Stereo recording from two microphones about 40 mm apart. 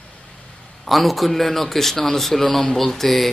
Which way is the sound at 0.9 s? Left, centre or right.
Centre.